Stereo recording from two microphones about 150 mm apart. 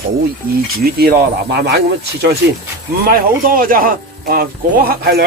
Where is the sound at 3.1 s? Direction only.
70° right (ahead or behind).